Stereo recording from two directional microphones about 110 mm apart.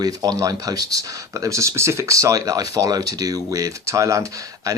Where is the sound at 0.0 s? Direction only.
35° right (ahead or behind).